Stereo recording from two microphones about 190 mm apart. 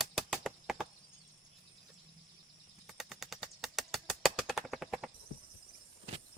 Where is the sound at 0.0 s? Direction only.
Centre (ahead or behind).